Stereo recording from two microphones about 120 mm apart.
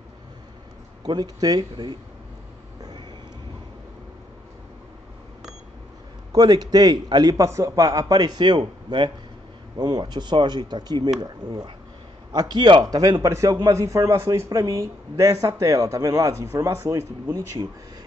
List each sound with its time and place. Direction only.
1.0 s a man's voice: 35° right (ahead or behind)
6.3 s a man's voice: 35° right (ahead or behind)